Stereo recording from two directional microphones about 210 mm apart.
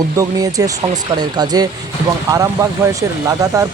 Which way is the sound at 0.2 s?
15° right (ahead or behind).